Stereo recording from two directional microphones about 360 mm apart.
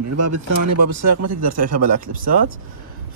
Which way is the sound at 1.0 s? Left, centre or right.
Right.